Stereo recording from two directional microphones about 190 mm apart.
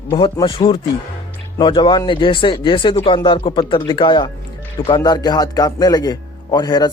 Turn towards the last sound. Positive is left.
turn(degrees=20)  # may be behind; listen again after turning